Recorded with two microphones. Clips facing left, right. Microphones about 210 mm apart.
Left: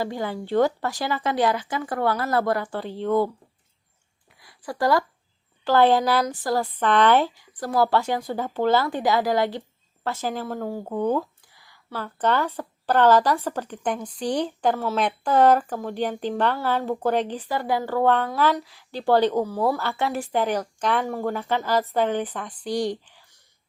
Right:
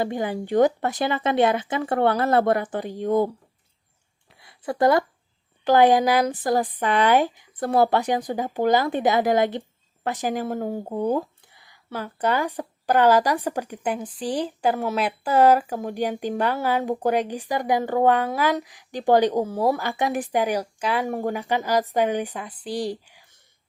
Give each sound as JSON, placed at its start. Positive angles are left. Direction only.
{"t": 0.0, "sound": "speech", "side_deg": -20}
{"t": 4.4, "sound": "a sound", "side_deg": -25}
{"t": 5.6, "sound": "speech", "side_deg": -15}